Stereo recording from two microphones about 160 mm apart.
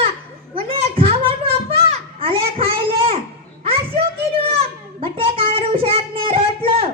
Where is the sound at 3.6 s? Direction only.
35° right (ahead or behind).